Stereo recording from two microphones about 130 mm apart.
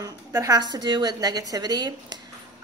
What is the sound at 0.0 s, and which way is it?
A woman's voice, 30° right (ahead or behind).